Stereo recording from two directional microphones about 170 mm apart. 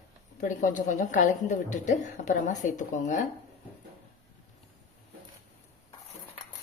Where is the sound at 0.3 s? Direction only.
50° left (ahead or behind).